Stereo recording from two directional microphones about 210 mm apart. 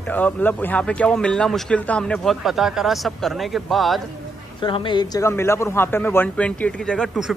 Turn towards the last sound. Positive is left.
turn(degrees=0)  # may be behind; listen again after turning